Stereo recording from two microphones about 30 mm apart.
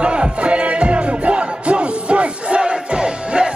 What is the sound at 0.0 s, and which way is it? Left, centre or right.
Music, right.